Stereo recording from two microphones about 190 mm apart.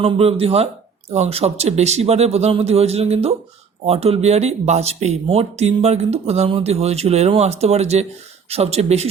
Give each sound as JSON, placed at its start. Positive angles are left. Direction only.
{"t": 0.0, "sound": "speech", "side_deg": -30}